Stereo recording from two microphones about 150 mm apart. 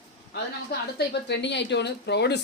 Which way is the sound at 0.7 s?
90° left.